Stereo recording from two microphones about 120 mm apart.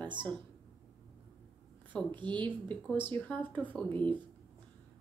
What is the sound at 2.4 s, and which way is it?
Speech, 10° left (ahead or behind).